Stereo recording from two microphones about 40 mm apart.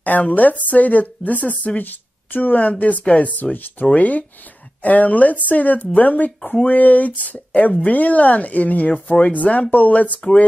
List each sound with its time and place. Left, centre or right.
0.0 s speech: left
2.7 s speech: left